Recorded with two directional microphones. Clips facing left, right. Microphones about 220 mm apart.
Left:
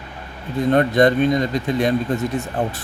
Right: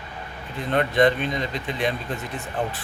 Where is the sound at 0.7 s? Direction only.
40° left (ahead or behind).